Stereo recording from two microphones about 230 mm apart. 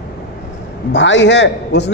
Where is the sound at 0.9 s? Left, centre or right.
Left.